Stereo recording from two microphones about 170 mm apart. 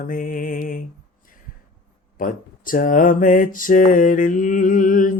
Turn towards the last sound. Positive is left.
turn(degrees=50)  # may be behind; listen again after turning